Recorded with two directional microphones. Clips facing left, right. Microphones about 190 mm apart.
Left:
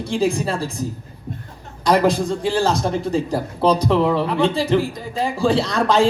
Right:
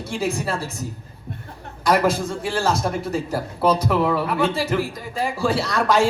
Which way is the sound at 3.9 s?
20° left (ahead or behind).